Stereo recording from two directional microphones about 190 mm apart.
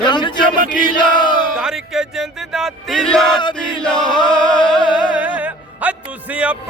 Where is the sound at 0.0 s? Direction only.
25° left (ahead or behind).